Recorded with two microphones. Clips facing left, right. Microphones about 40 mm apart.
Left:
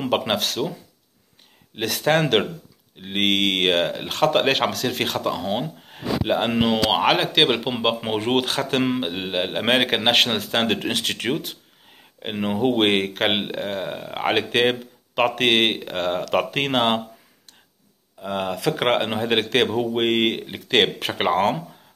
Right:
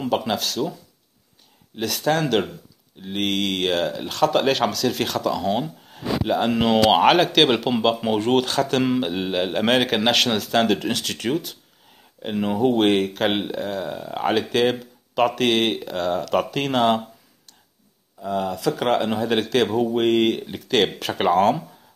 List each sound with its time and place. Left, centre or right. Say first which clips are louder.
0.0 s speech: left 1 dB; left
2.0 s speech: left 2 dB; left
5.9 s a sound: left 1 dB; left
6.8 s speech: right 4 dB; centre
7.6 s speech: right 3 dB; left
18.2 s speech: right 1 dB; left